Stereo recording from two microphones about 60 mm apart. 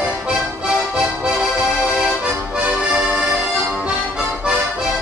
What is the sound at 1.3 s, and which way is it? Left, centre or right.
Accordion, centre.